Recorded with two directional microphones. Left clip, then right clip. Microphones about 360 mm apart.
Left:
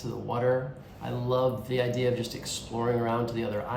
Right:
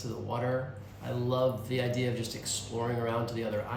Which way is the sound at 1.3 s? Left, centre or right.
Centre.